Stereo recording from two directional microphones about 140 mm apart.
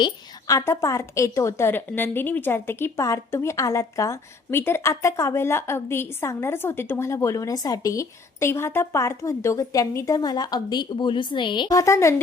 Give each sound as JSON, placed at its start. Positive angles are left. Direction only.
{"t": 0.0, "sound": "a woman's voice", "side_deg": 25}